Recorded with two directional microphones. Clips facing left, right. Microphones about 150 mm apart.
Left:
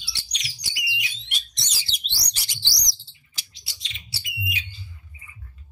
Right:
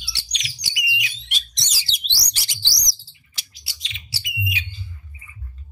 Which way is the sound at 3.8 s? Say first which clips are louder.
Right 3 dB; 90° right.